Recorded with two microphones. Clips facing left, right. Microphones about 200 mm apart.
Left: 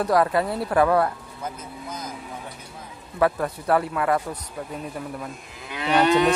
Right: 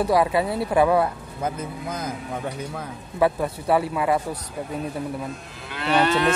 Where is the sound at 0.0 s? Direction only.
5° right (ahead or behind).